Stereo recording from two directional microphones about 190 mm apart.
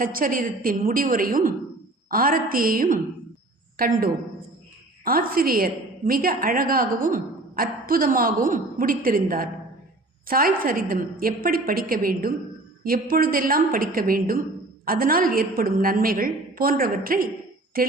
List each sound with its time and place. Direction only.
0.0 s a woman's voice: 45° right (ahead or behind)